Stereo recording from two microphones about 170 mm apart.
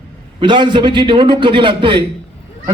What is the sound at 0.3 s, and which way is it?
Speech, 25° right (ahead or behind).